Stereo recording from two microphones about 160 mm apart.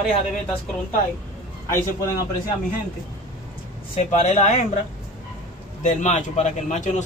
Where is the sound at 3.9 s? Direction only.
45° left (ahead or behind).